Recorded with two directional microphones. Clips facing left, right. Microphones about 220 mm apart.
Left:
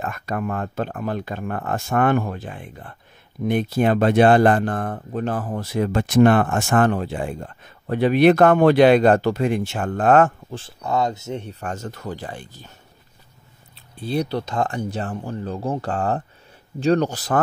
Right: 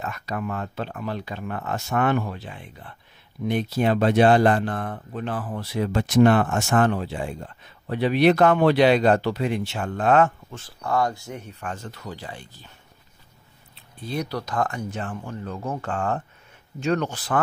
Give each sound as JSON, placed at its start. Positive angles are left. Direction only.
{"t": 0.0, "sound": "speech", "side_deg": 50}
{"t": 10.5, "sound": "speech", "side_deg": 25}
{"t": 11.6, "sound": "speech", "side_deg": 45}
{"t": 13.9, "sound": "speech", "side_deg": 30}